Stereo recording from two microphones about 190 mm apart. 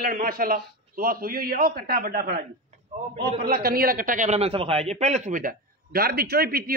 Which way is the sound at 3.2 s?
25° right (ahead or behind).